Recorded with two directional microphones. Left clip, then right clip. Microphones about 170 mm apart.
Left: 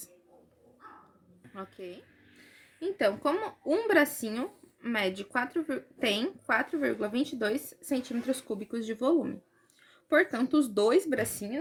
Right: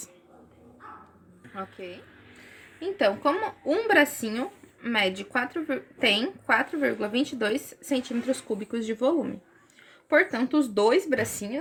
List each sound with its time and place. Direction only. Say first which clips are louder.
2.8 s speech: right 4 dB; 30° left (ahead or behind); by 11.3 s 15° left (ahead or behind)